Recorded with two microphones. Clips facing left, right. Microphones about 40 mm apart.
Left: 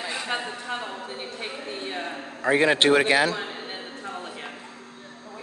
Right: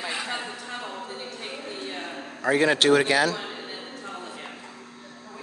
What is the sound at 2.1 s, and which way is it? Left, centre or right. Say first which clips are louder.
A man's voice: left 1 dB; centre.